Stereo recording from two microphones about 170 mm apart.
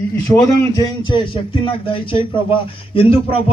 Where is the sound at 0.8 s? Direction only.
30° left (ahead or behind).